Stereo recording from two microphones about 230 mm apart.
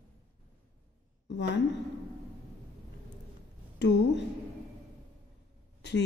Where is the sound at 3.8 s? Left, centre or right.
Left.